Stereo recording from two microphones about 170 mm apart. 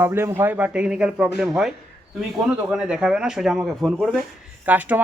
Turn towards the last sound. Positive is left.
turn(degrees=-10)  # may be behind; listen again after turning